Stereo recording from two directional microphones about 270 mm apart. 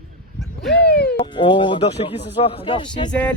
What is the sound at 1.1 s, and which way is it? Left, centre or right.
Speech, centre.